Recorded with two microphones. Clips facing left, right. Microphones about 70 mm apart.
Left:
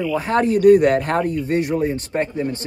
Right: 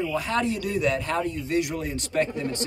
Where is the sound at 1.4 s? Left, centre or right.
Left.